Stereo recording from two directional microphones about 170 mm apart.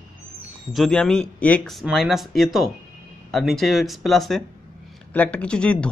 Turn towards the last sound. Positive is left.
turn(degrees=5)  # may be behind; listen again after turning